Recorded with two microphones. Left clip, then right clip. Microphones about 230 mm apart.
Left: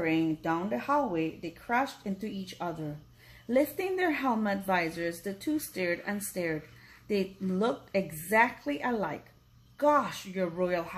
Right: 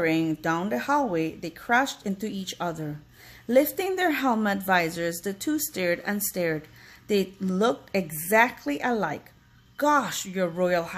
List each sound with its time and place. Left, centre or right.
0.0 s a woman's voice: right